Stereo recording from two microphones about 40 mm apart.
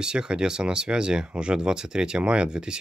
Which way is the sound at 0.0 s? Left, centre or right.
Centre.